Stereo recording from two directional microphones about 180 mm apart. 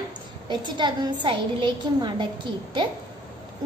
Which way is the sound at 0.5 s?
25° right (ahead or behind).